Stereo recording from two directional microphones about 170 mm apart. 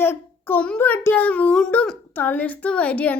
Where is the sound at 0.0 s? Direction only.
10° left (ahead or behind).